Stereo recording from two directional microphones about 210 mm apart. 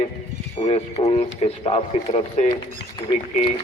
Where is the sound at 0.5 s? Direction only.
25° left (ahead or behind).